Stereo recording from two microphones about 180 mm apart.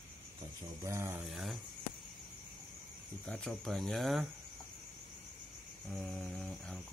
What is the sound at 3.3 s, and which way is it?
Speech, centre (ahead or behind).